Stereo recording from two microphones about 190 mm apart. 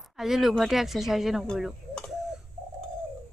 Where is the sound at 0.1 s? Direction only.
Centre (ahead or behind).